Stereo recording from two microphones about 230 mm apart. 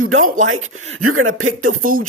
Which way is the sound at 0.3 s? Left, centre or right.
Right.